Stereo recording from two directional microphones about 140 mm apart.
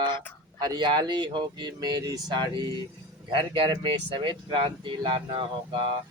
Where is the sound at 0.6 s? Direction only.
30° right (ahead or behind).